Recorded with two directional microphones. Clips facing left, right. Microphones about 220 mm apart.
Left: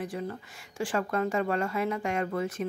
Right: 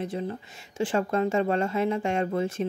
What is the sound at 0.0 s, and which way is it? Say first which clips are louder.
Speech: right 3 dB; 25° right (ahead or behind).